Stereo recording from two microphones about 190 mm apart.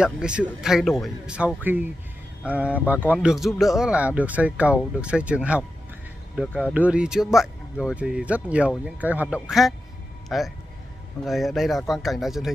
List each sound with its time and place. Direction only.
0.0 s speech: 5° right (ahead or behind)